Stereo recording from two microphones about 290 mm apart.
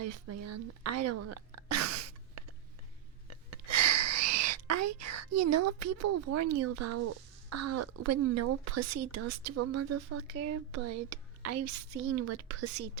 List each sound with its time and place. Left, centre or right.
0.0 s a woman's voice: right
3.5 s speech: right